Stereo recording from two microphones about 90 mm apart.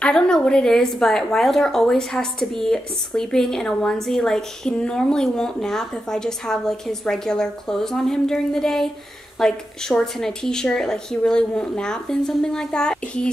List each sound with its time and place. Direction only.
0.0 s a woman's voice: 5° left (ahead or behind)